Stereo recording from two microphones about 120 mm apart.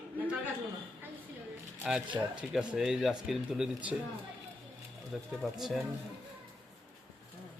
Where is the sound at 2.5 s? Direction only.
5° right (ahead or behind).